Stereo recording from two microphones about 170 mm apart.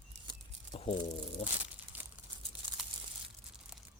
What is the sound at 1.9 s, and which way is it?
Crumpling, 10° right (ahead or behind).